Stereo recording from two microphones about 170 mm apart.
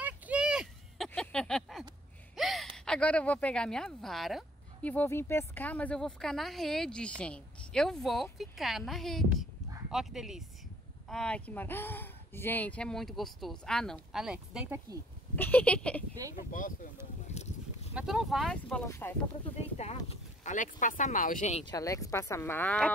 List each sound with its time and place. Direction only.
0.0 s a sound: 5° right (ahead or behind)
2.3 s speech: centre (ahead or behind)
4.8 s speech: 10° left (ahead or behind); by 14.8 s 5° right (ahead or behind)
15.3 s speech: 10° left (ahead or behind)
16.2 s speech: 20° right (ahead or behind)
17.3 s a sound: 40° left (ahead or behind)
17.9 s speech: centre (ahead or behind); by 19.1 s 15° left (ahead or behind)
19.4 s speech: 40° left (ahead or behind)
21.6 s speech: 20° left (ahead or behind)